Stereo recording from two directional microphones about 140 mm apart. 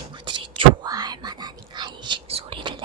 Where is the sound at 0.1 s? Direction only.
35° right (ahead or behind).